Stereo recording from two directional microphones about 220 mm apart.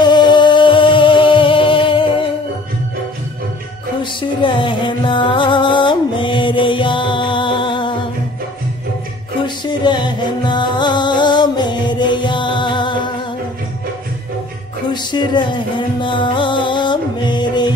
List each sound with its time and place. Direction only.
0.0 s music: 20° left (ahead or behind)
4.0 s music: 20° left (ahead or behind)
9.6 s music: 20° left (ahead or behind)
14.9 s music: 20° left (ahead or behind)